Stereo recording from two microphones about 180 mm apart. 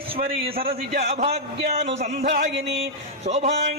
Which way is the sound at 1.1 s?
35° right (ahead or behind).